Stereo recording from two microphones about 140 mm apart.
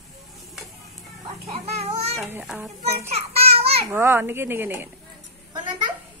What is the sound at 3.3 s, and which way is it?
Children playing, 45° right (ahead or behind).